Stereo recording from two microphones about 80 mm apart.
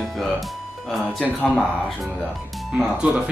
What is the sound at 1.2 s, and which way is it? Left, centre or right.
Speech, centre.